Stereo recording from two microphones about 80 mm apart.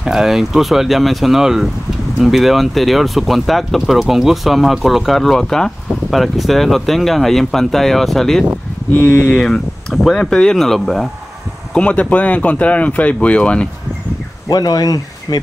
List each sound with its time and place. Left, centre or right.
0.0 s speech: centre
8.9 s speech: left
9.4 s speech: centre
11.7 s speech: centre
14.5 s speech: left